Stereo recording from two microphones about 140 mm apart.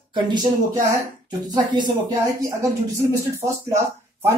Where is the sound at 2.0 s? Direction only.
20° right (ahead or behind).